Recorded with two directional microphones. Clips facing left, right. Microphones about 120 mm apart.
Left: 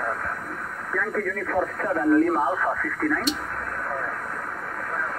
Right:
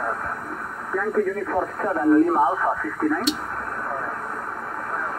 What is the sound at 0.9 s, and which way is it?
Speech, 25° right (ahead or behind).